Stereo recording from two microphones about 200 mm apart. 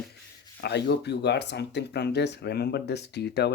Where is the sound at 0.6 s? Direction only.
60° left (ahead or behind).